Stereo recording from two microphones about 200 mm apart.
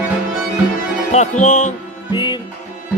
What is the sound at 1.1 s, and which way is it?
Speech, 35° left (ahead or behind).